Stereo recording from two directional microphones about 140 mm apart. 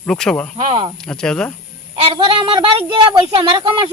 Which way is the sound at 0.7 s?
40° right (ahead or behind).